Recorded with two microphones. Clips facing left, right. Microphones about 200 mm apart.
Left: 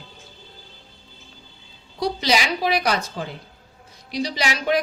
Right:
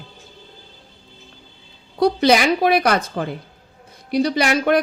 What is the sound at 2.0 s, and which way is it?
Speech, 55° right (ahead or behind).